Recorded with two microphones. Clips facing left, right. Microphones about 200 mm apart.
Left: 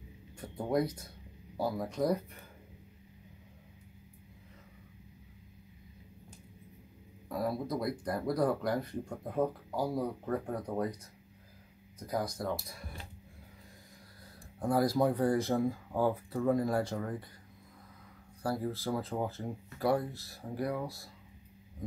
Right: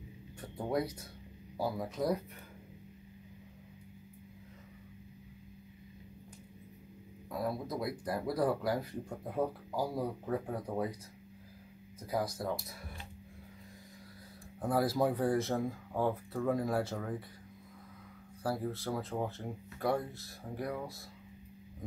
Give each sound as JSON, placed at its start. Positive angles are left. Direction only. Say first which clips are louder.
{"t": 0.4, "sound": "speech", "louder": "left 3 dB", "side_deg": -5}
{"t": 7.2, "sound": "speech", "louder": "left 2 dB", "side_deg": 0}
{"t": 12.1, "sound": "speech", "louder": "even", "side_deg": -5}
{"t": 14.6, "sound": "speech", "louder": "left 2 dB", "side_deg": -5}
{"t": 18.4, "sound": "speech", "louder": "left 1 dB", "side_deg": 0}